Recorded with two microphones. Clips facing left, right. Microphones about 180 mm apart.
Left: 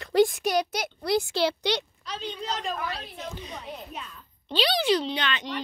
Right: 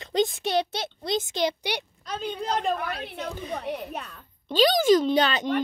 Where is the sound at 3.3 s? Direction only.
55° right (ahead or behind).